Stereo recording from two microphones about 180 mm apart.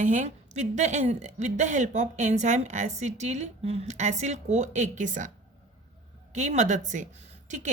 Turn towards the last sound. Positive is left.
turn(degrees=-45)  # may be behind; listen again after turning